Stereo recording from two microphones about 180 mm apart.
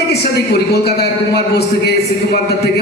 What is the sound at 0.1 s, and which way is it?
A man's voice, 60° left (ahead or behind).